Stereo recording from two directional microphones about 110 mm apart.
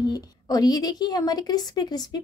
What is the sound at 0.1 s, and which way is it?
Speech, 35° left (ahead or behind).